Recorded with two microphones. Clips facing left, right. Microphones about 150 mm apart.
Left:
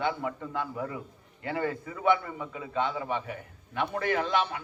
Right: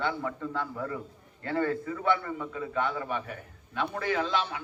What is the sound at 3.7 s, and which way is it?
Speech, 60° left (ahead or behind).